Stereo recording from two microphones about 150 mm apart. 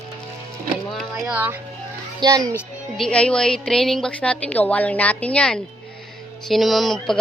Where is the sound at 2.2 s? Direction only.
25° right (ahead or behind).